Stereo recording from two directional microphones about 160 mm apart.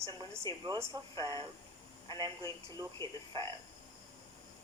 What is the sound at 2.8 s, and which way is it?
Speech, 15° right (ahead or behind).